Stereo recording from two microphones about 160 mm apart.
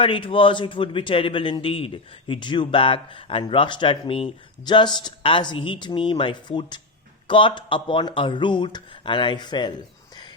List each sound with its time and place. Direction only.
0.0 s a man's voice: 35° left (ahead or behind)